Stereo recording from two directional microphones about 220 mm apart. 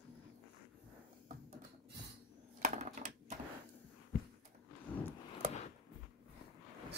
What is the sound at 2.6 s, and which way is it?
Sewing machine, 35° right (ahead or behind).